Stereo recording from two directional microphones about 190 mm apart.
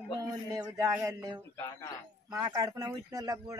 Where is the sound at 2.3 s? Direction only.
15° right (ahead or behind).